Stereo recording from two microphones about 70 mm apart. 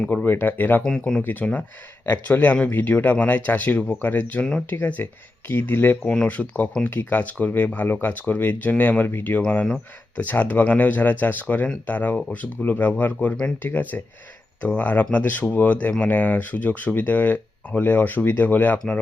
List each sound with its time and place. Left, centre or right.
0.1 s speech: left
0.8 s speech: centre
1.2 s speech: left